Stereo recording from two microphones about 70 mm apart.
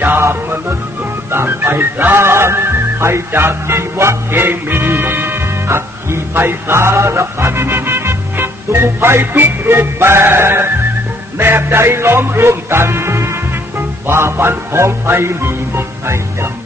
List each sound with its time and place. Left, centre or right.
0.2 s music: right
1.3 s speech: right
11.3 s music: right